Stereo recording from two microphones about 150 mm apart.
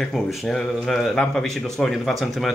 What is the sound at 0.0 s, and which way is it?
Speech, centre (ahead or behind).